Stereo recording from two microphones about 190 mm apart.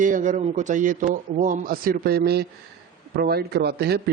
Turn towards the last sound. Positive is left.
turn(degrees=-60)  # may be behind; listen again after turning